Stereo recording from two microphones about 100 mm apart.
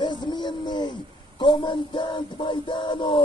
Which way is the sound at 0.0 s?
50° left (ahead or behind).